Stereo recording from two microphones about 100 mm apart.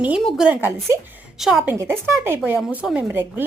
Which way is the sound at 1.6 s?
20° right (ahead or behind).